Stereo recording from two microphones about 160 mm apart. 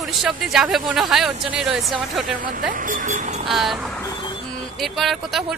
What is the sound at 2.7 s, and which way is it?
Speech, 55° right (ahead or behind).